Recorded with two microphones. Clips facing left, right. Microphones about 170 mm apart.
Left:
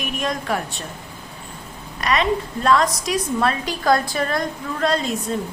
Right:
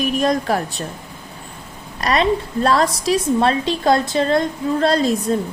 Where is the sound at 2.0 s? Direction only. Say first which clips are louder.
Right 3 dB; 35° right (ahead or behind).